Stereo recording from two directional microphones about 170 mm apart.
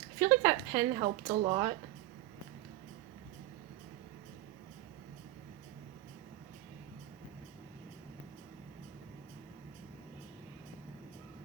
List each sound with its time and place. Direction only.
0.2 s a woman's voice: 20° right (ahead or behind)